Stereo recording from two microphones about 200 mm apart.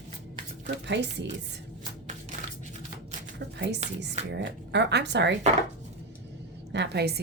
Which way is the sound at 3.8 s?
35° right (ahead or behind).